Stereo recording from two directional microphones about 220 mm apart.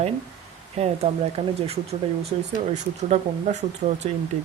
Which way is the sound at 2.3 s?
30° right (ahead or behind).